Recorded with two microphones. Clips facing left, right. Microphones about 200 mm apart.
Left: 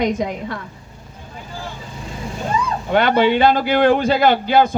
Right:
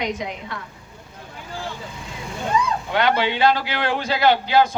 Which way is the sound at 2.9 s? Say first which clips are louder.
Left 7 dB; 50° left (ahead or behind).